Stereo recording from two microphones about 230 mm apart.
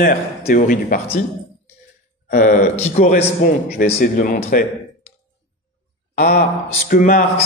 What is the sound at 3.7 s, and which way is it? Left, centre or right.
Speech, left.